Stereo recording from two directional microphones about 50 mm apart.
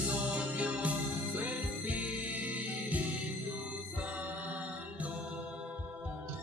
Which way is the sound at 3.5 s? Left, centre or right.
Right.